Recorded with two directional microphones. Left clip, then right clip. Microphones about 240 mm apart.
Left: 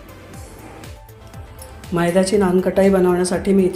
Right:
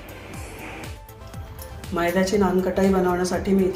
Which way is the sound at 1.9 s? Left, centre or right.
Left.